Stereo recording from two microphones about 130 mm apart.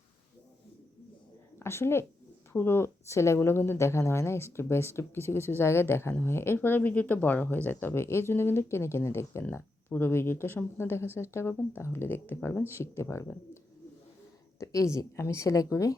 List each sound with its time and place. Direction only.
1.5 s a woman's voice: 20° left (ahead or behind)
14.6 s a woman's voice: 25° left (ahead or behind)